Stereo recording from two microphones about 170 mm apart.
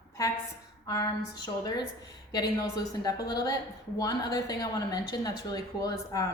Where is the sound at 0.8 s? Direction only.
20° left (ahead or behind).